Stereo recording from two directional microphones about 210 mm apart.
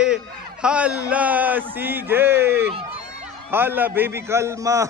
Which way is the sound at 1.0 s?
5° right (ahead or behind).